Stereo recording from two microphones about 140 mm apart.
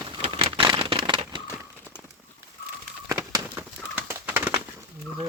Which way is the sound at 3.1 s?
25° right (ahead or behind).